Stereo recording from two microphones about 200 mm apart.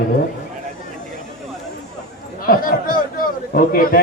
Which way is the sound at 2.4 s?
45° left (ahead or behind).